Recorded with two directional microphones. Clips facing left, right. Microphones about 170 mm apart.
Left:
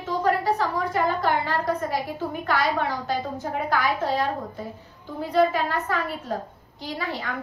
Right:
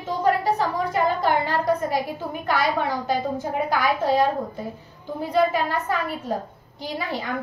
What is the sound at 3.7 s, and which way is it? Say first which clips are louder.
Speech: right 3 dB; 15° right (ahead or behind).